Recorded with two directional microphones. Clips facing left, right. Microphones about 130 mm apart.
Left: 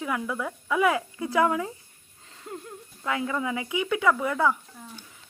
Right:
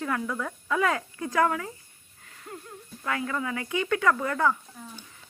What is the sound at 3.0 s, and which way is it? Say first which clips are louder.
Speech: left 2 dB; 15° left (ahead or behind).